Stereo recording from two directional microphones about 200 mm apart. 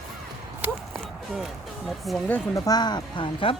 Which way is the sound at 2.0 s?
Centre (ahead or behind).